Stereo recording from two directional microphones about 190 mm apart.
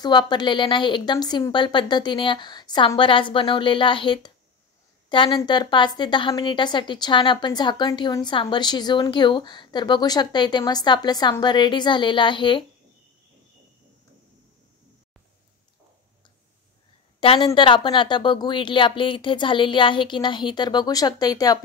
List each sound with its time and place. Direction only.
0.0 s a woman's voice: 25° left (ahead or behind)
17.2 s a woman's voice: 30° left (ahead or behind)